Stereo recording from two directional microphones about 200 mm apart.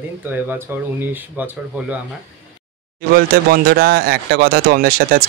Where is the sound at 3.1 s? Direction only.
50° right (ahead or behind).